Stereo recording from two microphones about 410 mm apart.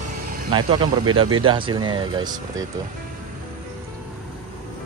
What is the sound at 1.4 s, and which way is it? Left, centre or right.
Speech, centre.